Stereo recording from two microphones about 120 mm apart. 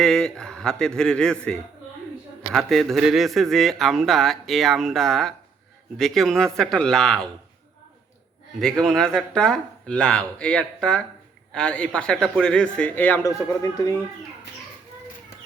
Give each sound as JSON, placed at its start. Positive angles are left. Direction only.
{"t": 0.0, "sound": "a man's voice", "side_deg": 5}
{"t": 8.8, "sound": "speech", "side_deg": 5}
{"t": 13.2, "sound": "speech", "side_deg": 25}